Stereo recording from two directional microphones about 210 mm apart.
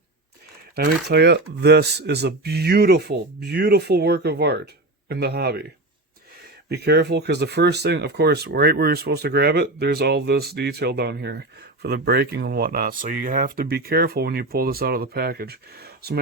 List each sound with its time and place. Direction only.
0.8 s speech: 50° right (ahead or behind)
6.7 s speech: 50° right (ahead or behind)